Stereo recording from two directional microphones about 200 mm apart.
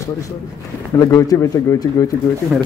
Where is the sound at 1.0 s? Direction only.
15° left (ahead or behind).